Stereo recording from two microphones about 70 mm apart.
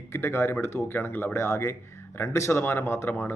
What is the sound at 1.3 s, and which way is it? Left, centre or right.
Speech, left.